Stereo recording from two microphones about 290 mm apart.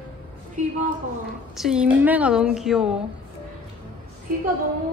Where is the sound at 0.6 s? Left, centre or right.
Right.